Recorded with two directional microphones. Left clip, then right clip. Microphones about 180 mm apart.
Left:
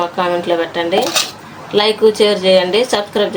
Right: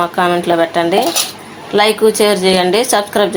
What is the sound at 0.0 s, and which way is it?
A woman's voice, 30° right (ahead or behind).